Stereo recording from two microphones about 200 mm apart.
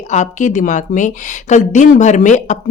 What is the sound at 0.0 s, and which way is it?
A woman's voice, 35° left (ahead or behind).